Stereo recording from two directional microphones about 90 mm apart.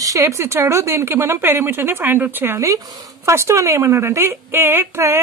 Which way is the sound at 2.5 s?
40° right (ahead or behind).